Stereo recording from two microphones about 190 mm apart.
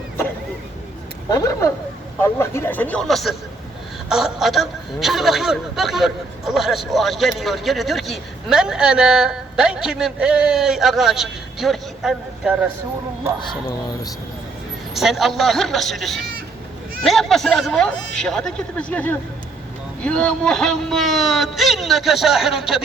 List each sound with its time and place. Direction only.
1.3 s a man's voice: 20° left (ahead or behind); by 12.6 s 5° right (ahead or behind)
14.9 s a man's voice: centre (ahead or behind)